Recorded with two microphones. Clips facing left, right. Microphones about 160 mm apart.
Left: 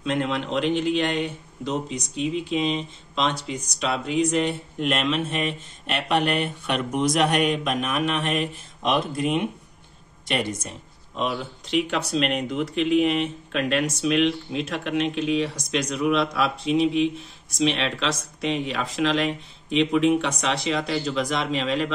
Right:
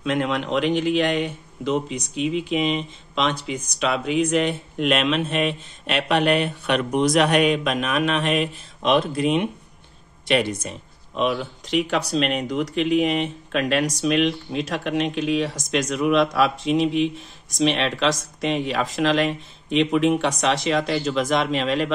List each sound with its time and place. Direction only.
0.0 s speech: 55° right (ahead or behind); by 10.7 s 75° right (ahead or behind)
11.6 s speech: 40° right (ahead or behind)
14.0 s speech: 50° right (ahead or behind)